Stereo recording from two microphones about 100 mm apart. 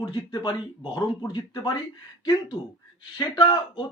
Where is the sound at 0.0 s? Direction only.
50° left (ahead or behind).